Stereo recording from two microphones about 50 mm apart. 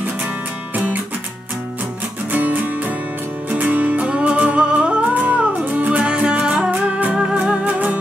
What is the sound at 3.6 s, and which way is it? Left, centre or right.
Music, right.